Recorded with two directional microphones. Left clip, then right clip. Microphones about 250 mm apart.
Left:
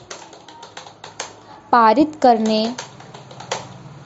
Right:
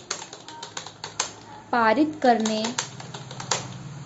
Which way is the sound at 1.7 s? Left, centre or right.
Left.